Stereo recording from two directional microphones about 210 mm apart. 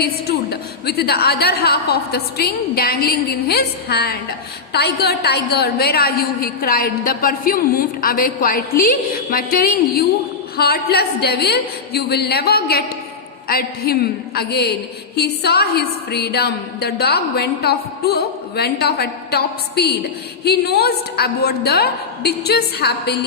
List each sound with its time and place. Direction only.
0.0 s a woman's voice: 50° left (ahead or behind)